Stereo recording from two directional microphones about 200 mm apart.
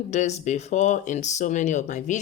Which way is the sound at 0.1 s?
35° left (ahead or behind).